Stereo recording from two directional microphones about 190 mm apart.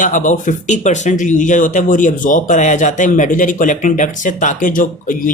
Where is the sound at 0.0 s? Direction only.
45° left (ahead or behind).